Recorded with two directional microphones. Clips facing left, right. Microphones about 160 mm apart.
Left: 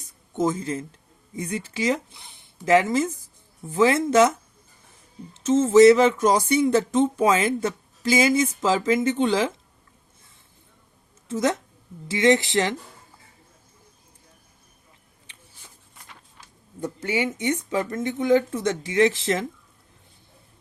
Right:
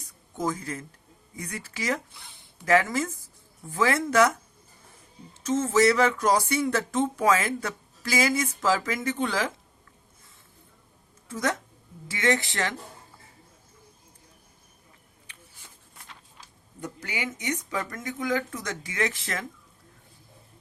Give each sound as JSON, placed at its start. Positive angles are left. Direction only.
{"t": 0.3, "sound": "speech", "side_deg": 25}
{"t": 11.3, "sound": "speech", "side_deg": 25}
{"t": 16.8, "sound": "speech", "side_deg": 25}